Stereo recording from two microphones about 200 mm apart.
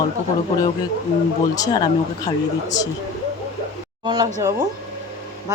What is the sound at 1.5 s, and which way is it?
Speech, 20° left (ahead or behind).